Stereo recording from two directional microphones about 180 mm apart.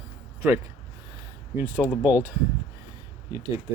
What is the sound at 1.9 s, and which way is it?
Speech, 10° right (ahead or behind).